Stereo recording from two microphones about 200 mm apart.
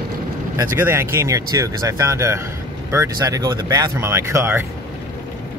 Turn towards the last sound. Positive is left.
turn(degrees=-10)  # may be behind; listen again after turning